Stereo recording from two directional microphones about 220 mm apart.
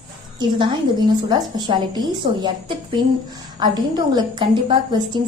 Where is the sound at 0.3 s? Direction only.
20° right (ahead or behind).